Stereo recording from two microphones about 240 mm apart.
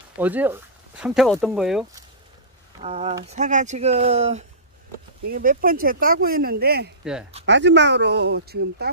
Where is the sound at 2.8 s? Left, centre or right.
Right.